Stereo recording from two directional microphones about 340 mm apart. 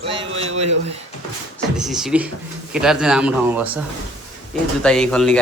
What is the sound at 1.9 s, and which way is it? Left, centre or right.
A man's voice, centre.